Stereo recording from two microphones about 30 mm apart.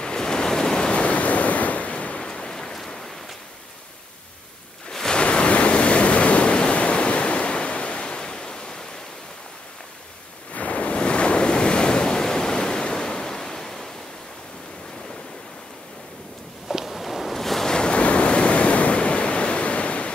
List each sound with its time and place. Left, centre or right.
0.0 s waves: left
0.9 s waves: left
2.2 s rain: left
2.5 s a sound: left
5.1 s waves: left
10.5 s waves: left; by 13.8 s centre
16.6 s a sound: centre
17.4 s waves: centre
17.6 s waves: left
17.9 s waves: left